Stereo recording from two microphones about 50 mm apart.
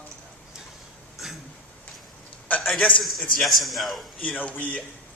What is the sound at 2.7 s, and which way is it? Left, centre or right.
Speech, left.